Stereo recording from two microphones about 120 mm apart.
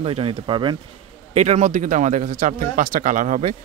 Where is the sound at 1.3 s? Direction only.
75° right (ahead or behind); by 3.5 s 90° right.